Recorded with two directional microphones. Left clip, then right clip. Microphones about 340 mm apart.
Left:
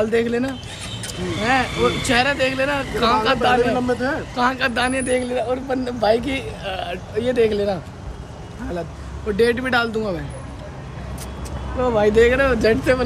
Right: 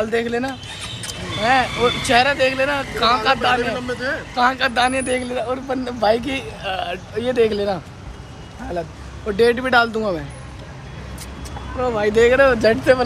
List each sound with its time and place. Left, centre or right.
0.0 s a man's voice: centre
3.7 s speech: centre
4.4 s a man's voice: centre
9.4 s a man's voice: centre
11.8 s a man's voice: centre